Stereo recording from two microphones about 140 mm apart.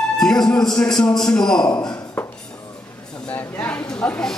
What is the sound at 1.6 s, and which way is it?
Speech, 30° left (ahead or behind).